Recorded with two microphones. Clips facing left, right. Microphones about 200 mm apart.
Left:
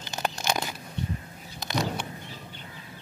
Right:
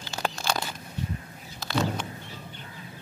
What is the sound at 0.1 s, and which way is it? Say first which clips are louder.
Crunch: even; 20° left (ahead or behind).